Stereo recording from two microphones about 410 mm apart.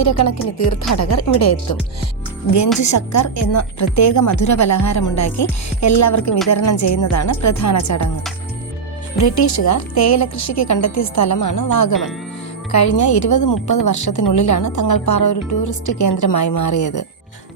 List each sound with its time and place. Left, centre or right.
0.0 s speech: left
2.7 s a woman's voice: left
9.1 s a woman's voice: left